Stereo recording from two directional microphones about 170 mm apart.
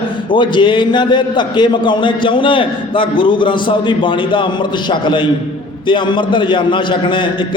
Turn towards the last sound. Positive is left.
turn(degrees=30)  # may be behind; listen again after turning